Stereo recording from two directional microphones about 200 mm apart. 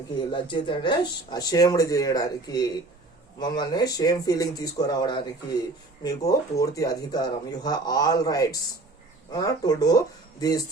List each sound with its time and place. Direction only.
0.3 s speech: 25° left (ahead or behind)